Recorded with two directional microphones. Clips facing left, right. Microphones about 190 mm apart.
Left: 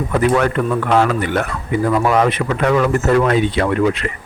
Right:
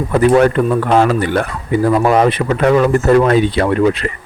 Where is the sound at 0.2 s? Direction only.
35° right (ahead or behind).